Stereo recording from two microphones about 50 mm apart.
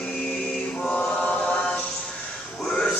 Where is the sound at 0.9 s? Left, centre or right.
Left.